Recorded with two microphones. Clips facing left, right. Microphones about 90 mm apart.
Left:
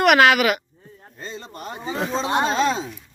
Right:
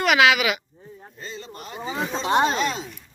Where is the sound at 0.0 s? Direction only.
55° left (ahead or behind).